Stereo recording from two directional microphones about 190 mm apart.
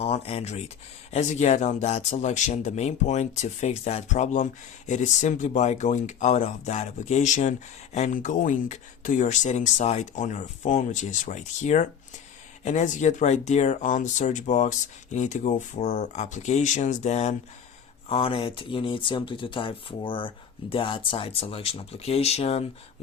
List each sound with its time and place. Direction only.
0.0 s speech: 35° left (ahead or behind)